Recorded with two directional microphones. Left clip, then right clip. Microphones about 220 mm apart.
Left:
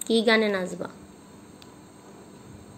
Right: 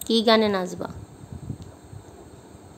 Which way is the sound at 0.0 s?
15° right (ahead or behind).